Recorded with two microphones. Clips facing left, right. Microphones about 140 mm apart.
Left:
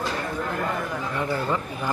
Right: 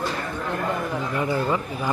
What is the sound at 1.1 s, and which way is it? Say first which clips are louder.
Speech: right 2 dB; 5° right (ahead or behind).